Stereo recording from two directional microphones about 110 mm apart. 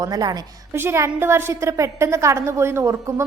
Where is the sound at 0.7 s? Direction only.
20° right (ahead or behind).